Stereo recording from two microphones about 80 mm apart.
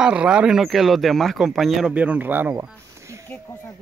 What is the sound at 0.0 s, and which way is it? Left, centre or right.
Speech, centre.